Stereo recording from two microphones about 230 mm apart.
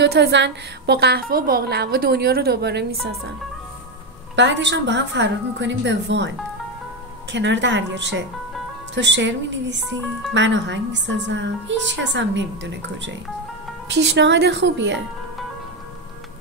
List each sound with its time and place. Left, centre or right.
0.0 s a woman's voice: right
4.4 s a woman's voice: right
7.3 s a woman's voice: right